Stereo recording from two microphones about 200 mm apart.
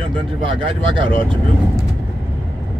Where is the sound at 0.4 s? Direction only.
25° right (ahead or behind).